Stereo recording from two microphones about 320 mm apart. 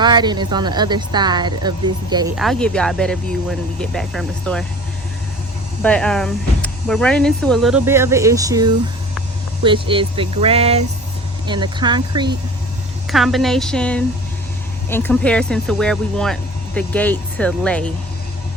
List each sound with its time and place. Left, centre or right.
0.0 s a woman's voice: centre
2.3 s speech: centre
5.8 s a woman's voice: centre
13.1 s speech: centre